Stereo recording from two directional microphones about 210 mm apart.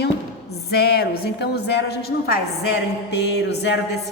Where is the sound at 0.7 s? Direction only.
50° left (ahead or behind).